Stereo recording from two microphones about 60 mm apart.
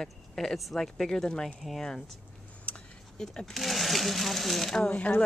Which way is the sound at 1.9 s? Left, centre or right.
Centre.